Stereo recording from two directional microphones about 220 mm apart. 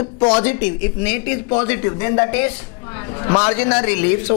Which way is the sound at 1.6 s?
15° left (ahead or behind).